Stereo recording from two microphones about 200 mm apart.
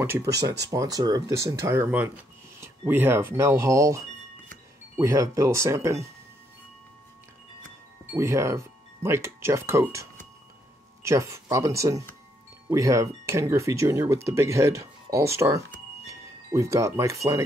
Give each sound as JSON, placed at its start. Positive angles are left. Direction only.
{"t": 0.7, "sound": "speech", "side_deg": -15}
{"t": 8.1, "sound": "speech", "side_deg": -15}
{"t": 16.1, "sound": "wind chime", "side_deg": -15}